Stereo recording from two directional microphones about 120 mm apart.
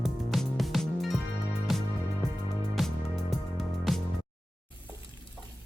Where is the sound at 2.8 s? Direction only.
Centre (ahead or behind).